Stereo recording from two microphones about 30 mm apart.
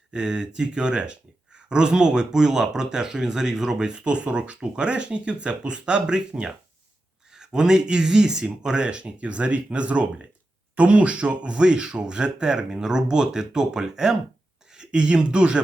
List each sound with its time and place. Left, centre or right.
0.1 s speech: right
12.5 s speech: right